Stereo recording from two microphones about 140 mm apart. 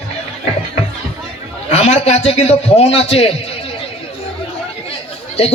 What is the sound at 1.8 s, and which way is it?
A man's voice, 55° left (ahead or behind).